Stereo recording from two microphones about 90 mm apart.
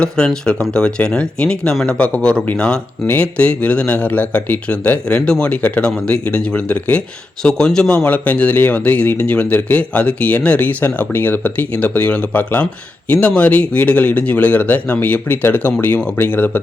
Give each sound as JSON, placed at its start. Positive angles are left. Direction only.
{"t": 0.0, "sound": "speech", "side_deg": 10}